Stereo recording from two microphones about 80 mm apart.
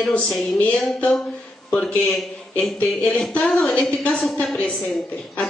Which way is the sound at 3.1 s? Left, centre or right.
Centre.